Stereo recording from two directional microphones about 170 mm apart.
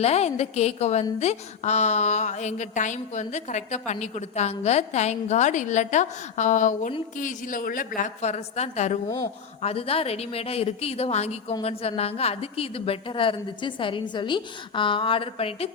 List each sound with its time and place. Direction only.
0.0 s a woman's voice: 40° left (ahead or behind)